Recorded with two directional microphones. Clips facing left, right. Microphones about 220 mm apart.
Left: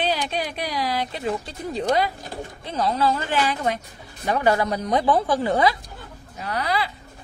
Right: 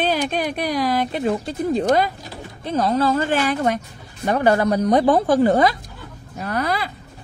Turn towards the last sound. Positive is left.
turn(degrees=-50)  # may be behind; listen again after turning